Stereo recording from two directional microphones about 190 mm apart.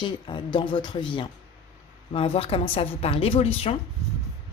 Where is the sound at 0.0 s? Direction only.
25° left (ahead or behind).